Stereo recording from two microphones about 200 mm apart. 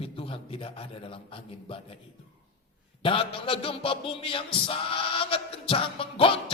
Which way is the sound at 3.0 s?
25° left (ahead or behind).